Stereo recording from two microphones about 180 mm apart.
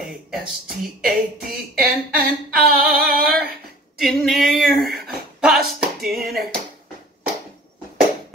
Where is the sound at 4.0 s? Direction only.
Centre (ahead or behind).